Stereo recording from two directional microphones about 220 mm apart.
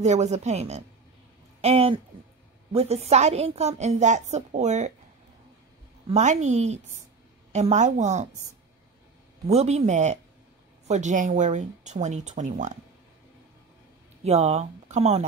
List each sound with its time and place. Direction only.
0.0 s a woman's voice: 30° right (ahead or behind)
6.0 s a woman's voice: 30° right (ahead or behind)
9.5 s a woman's voice: 30° right (ahead or behind)
14.2 s speech: 30° right (ahead or behind)